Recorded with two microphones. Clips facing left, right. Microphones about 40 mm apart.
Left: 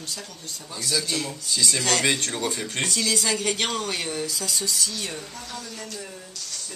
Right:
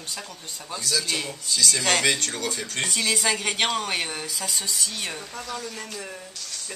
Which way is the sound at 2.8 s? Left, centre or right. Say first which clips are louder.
Right 1 dB; right.